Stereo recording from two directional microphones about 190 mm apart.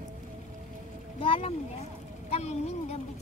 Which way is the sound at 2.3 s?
35° left (ahead or behind).